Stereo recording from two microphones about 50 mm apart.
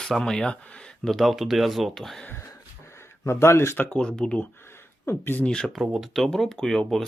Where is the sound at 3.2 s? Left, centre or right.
Left.